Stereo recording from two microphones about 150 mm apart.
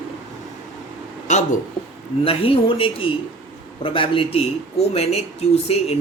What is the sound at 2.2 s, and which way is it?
A man's voice, 40° left (ahead or behind).